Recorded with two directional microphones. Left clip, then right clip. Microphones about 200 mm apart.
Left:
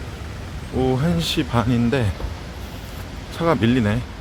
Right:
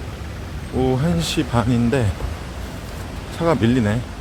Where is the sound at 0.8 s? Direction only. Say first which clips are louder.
Right 1 dB; 5° left (ahead or behind).